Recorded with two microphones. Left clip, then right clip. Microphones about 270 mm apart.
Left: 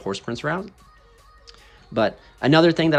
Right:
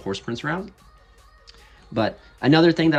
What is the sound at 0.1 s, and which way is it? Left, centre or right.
Speech, centre.